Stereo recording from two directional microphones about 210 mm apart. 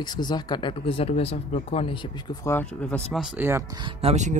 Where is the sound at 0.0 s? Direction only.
20° left (ahead or behind).